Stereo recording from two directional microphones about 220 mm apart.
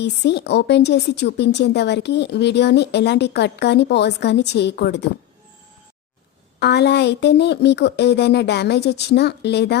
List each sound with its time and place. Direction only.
0.0 s a woman's voice: 50° left (ahead or behind)
6.6 s a woman's voice: 50° left (ahead or behind)